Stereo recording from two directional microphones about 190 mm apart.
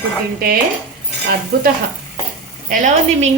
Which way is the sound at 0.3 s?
55° right (ahead or behind).